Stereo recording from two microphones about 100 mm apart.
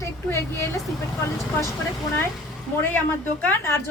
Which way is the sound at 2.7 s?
25° left (ahead or behind).